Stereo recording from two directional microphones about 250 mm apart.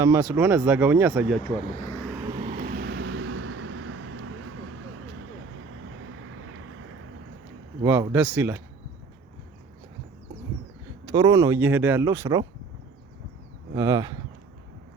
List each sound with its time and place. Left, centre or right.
0.0 s speech: centre
2.3 s vehicle: right
6.3 s vehicle: right
7.8 s speech: centre
11.0 s speech: centre
13.7 s speech: centre